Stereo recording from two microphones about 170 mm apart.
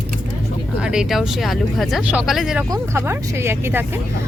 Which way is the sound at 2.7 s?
15° right (ahead or behind).